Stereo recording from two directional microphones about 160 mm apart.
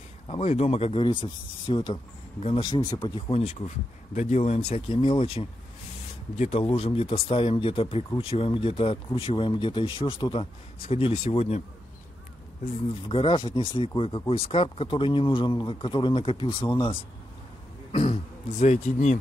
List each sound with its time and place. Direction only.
0.3 s speech: 40° left (ahead or behind); by 3.3 s 25° left (ahead or behind)
3.3 s speech: 40° left (ahead or behind)
6.6 s speech: 30° left (ahead or behind)
13.1 s speech: 30° left (ahead or behind)
18.6 s speech: 50° left (ahead or behind)